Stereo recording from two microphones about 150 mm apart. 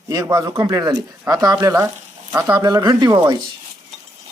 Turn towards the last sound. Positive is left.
turn(degrees=-25)  # may be behind; listen again after turning